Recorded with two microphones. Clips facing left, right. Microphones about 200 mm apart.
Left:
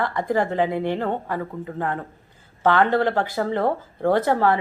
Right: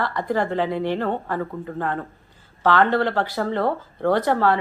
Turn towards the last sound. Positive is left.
turn(degrees=20)  # may be behind; listen again after turning